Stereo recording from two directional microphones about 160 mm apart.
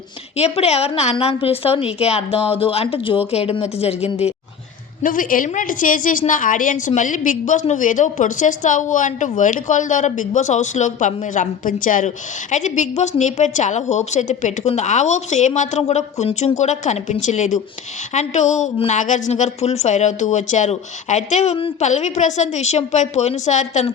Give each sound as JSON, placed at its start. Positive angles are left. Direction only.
{"t": 0.3, "sound": "a woman's voice", "side_deg": 40}
{"t": 5.0, "sound": "a woman's voice", "side_deg": 60}